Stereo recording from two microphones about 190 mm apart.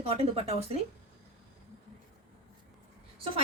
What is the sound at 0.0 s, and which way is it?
Speech, 30° right (ahead or behind).